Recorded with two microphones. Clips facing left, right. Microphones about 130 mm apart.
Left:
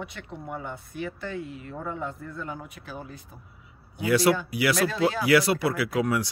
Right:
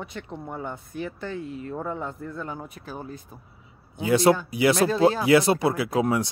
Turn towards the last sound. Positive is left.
turn(degrees=-25)  # may be behind; listen again after turning